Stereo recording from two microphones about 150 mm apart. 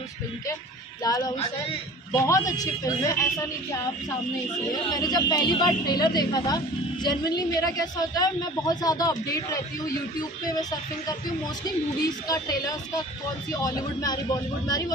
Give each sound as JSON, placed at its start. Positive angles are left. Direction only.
{"t": 1.0, "sound": "a man's voice", "side_deg": 25}